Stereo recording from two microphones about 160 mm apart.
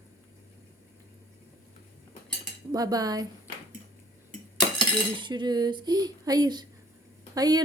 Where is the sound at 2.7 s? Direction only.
25° right (ahead or behind).